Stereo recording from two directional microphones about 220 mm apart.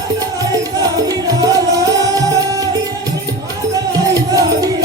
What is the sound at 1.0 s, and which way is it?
Music, 15° right (ahead or behind).